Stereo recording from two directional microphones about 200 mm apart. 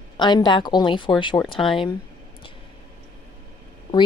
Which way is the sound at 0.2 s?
20° left (ahead or behind).